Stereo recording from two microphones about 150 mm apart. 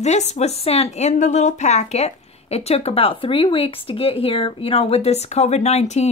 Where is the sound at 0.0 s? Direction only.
50° left (ahead or behind).